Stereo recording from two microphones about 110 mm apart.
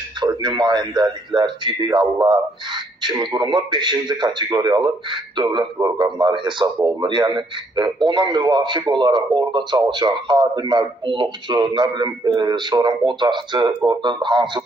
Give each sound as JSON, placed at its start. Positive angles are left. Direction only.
{"t": 0.3, "sound": "a man's voice", "side_deg": -40}